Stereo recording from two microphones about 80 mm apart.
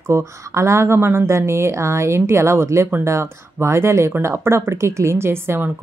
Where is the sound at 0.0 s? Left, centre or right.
Right.